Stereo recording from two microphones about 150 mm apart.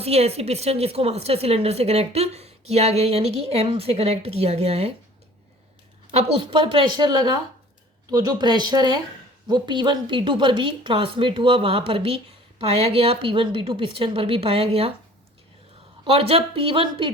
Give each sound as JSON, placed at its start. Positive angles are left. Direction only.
{"t": 0.0, "sound": "speech", "side_deg": -45}
{"t": 6.1, "sound": "speech", "side_deg": -40}
{"t": 16.0, "sound": "speech", "side_deg": -40}